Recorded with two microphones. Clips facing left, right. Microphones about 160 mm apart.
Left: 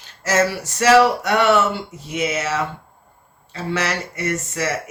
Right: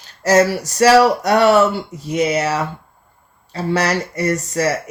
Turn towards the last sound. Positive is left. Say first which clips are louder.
# right 5 dB
turn(degrees=-40)  # may be behind; listen again after turning